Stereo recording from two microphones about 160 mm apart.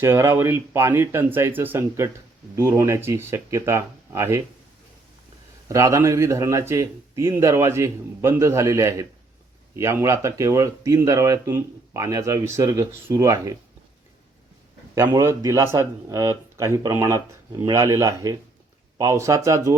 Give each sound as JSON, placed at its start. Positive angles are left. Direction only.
{"t": 0.0, "sound": "speech", "side_deg": -15}
{"t": 5.6, "sound": "speech", "side_deg": -20}
{"t": 14.9, "sound": "speech", "side_deg": -15}